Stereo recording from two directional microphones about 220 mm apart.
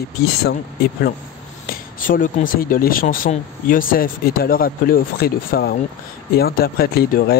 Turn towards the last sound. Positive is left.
turn(degrees=45)  # may be behind; listen again after turning